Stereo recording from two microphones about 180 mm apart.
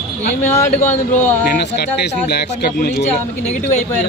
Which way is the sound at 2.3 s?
65° left (ahead or behind).